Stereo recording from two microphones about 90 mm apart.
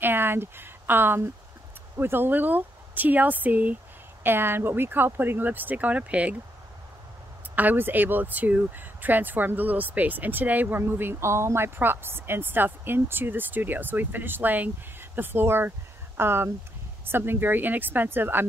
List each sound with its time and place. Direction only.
0.0 s speech: 25° right (ahead or behind)
7.5 s speech: 20° right (ahead or behind)